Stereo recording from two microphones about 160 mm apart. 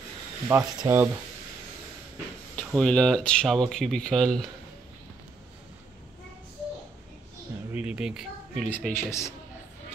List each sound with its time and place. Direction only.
0.5 s speech: 15° right (ahead or behind)
2.5 s speech: 5° left (ahead or behind)
7.7 s speech: 5° right (ahead or behind)
8.6 s speech: 10° left (ahead or behind)